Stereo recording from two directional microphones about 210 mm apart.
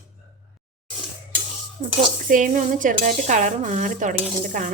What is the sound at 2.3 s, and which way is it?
Dishes, 40° right (ahead or behind).